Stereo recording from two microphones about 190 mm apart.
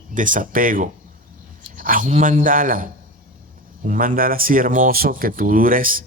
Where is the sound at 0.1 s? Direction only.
45° right (ahead or behind).